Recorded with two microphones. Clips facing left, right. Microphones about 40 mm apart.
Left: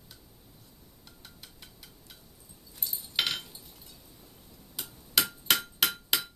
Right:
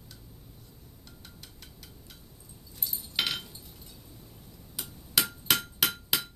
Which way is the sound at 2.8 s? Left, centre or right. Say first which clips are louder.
Even; centre.